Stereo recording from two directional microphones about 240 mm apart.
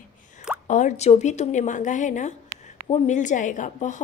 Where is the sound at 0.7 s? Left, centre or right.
Left.